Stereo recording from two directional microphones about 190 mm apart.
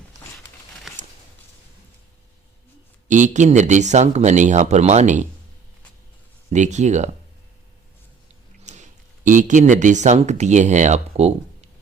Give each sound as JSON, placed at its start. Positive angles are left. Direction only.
{"t": 3.1, "sound": "speech", "side_deg": -40}
{"t": 6.5, "sound": "speech", "side_deg": -40}
{"t": 8.6, "sound": "speech", "side_deg": -40}